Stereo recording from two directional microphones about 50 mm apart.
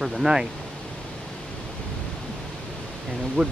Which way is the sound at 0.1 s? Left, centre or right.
Centre.